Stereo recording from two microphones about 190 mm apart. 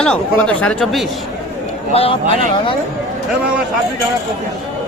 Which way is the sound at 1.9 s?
30° left (ahead or behind).